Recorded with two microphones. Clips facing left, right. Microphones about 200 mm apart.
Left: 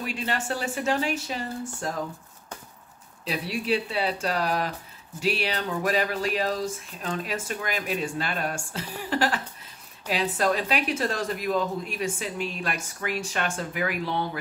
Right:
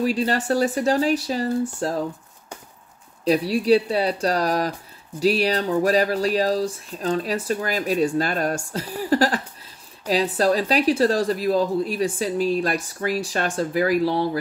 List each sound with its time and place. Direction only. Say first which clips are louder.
0.0 s a woman's voice: right 9 dB; 35° right (ahead or behind)
3.3 s a woman's voice: right 10 dB; 40° right (ahead or behind)